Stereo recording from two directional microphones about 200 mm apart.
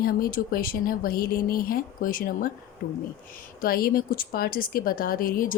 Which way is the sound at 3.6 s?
45° left (ahead or behind).